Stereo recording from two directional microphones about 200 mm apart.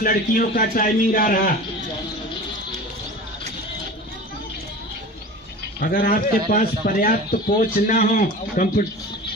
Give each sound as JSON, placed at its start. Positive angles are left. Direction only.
{"t": 0.0, "sound": "a man's voice", "side_deg": 45}
{"t": 5.8, "sound": "a man's voice", "side_deg": 45}